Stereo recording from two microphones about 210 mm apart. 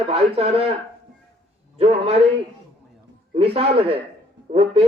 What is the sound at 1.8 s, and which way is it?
Speech, 30° right (ahead or behind).